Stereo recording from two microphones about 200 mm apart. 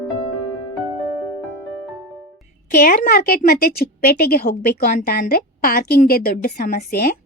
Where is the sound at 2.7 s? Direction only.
45° left (ahead or behind).